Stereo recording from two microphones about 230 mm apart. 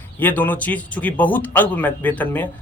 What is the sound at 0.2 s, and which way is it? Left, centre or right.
Speech, centre.